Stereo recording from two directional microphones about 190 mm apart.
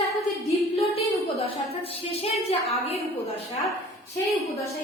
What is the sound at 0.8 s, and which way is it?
A woman's voice, 30° left (ahead or behind).